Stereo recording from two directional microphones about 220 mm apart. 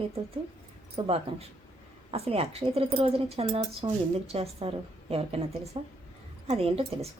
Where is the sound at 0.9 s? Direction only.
25° right (ahead or behind).